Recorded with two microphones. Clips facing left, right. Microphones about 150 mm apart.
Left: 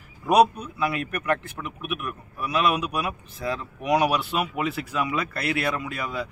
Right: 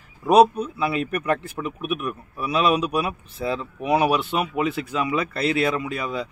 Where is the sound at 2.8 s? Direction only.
30° right (ahead or behind).